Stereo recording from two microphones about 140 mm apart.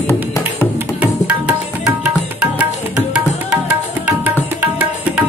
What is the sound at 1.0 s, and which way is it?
Tabla, 10° right (ahead or behind).